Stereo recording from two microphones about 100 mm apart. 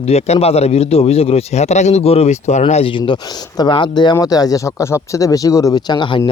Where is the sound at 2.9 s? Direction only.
55° left (ahead or behind).